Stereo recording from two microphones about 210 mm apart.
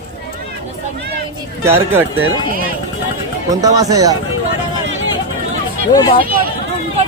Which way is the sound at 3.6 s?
15° right (ahead or behind).